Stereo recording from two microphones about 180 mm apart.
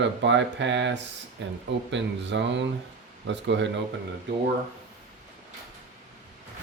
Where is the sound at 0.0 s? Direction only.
85° right.